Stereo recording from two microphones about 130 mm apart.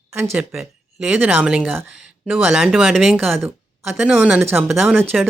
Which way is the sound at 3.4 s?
15° right (ahead or behind).